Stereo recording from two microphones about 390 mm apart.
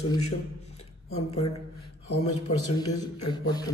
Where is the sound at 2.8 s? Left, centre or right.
Centre.